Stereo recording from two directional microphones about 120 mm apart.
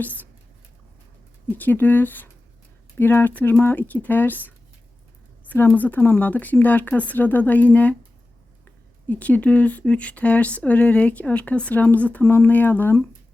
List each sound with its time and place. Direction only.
0.0 s speech: 15° left (ahead or behind)
1.5 s speech: 15° left (ahead or behind)